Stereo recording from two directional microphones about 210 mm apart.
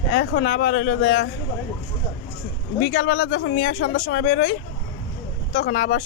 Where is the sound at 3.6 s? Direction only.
55° left (ahead or behind); by 4.3 s 70° left (ahead or behind).